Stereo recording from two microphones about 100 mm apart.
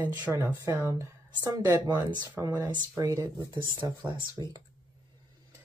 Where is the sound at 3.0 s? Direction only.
35° right (ahead or behind).